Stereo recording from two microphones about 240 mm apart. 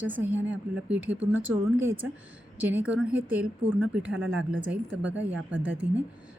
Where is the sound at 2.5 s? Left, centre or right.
Centre.